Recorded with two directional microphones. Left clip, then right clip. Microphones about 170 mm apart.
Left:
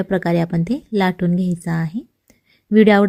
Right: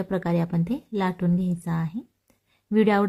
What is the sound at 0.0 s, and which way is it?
A woman's voice, 25° left (ahead or behind).